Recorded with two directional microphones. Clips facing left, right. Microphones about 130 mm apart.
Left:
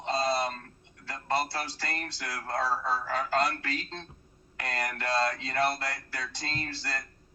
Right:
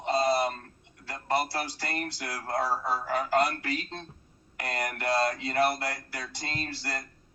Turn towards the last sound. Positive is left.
turn(degrees=-20)  # may be behind; listen again after turning